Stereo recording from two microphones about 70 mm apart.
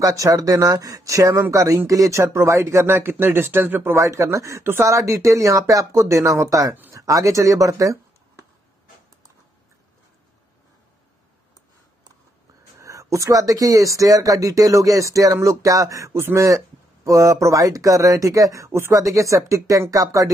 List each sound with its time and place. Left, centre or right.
0.0 s speech: right
3.9 s speech: right
12.7 s speech: right